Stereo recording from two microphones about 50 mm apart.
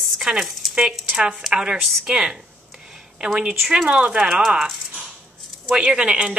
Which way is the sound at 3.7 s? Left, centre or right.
Centre.